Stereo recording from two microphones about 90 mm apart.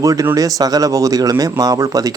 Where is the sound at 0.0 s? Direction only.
40° right (ahead or behind).